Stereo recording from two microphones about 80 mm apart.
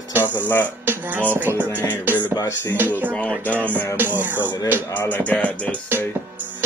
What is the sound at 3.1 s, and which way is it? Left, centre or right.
Music, centre.